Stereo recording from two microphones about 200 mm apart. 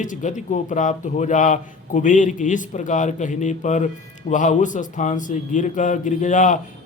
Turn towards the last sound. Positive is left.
turn(degrees=40)  # may be behind; listen again after turning